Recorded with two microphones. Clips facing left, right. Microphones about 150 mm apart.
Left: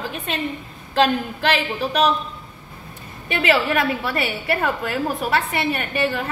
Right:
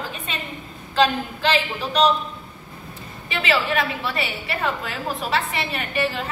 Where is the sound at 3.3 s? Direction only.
55° left (ahead or behind).